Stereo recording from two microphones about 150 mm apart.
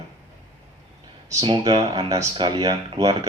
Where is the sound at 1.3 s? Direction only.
25° right (ahead or behind).